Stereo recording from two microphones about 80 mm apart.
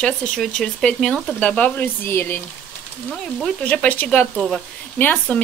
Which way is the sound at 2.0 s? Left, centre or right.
Left.